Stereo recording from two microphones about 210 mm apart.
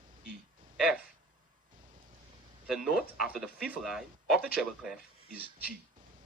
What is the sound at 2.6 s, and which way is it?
Speech, centre (ahead or behind).